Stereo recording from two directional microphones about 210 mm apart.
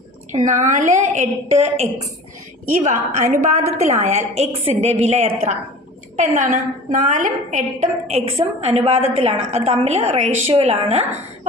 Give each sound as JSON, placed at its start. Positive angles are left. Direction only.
{"t": 0.3, "sound": "a woman's voice", "side_deg": -35}